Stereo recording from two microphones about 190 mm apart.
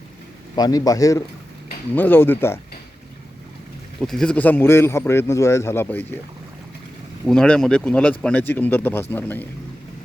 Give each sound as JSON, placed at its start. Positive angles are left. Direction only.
{"t": 0.5, "sound": "a man's voice", "side_deg": 20}
{"t": 4.0, "sound": "a man's voice", "side_deg": 5}
{"t": 7.3, "sound": "a man's voice", "side_deg": 5}